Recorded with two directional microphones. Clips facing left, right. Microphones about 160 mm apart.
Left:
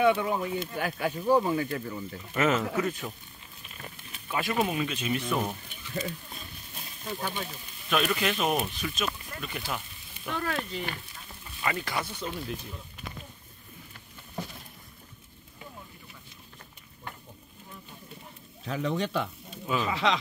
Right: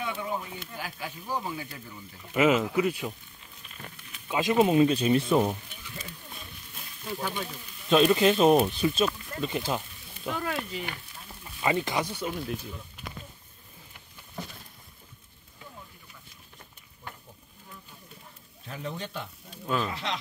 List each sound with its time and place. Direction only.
0.0 s speech: 75° left (ahead or behind)
0.7 s speech: 60° left (ahead or behind)
2.3 s speech: 10° right (ahead or behind)
4.3 s speech: 20° right (ahead or behind)
7.9 s speech: 30° right (ahead or behind)
10.3 s speech: 10° right (ahead or behind)
18.7 s speech: 90° left
19.6 s speech: 5° left (ahead or behind)
19.9 s speech: 90° left